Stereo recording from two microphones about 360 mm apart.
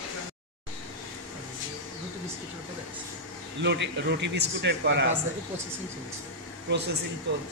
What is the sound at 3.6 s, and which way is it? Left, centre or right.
Speech, right.